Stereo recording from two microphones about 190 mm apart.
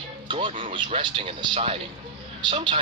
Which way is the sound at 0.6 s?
25° right (ahead or behind).